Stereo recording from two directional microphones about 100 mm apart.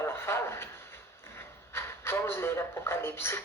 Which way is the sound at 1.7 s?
25° left (ahead or behind).